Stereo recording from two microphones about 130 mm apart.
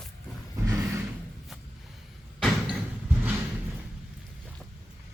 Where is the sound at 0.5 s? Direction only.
25° right (ahead or behind).